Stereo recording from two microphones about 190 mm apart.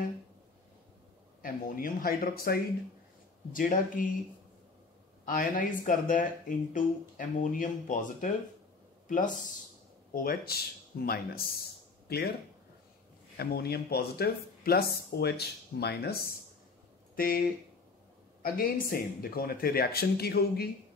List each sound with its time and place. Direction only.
1.4 s speech: 50° left (ahead or behind)
5.2 s speech: 45° left (ahead or behind)
13.4 s speech: 55° left (ahead or behind)
18.4 s speech: 50° left (ahead or behind)